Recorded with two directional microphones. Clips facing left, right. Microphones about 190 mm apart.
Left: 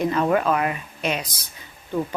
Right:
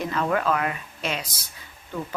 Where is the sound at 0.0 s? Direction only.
20° left (ahead or behind).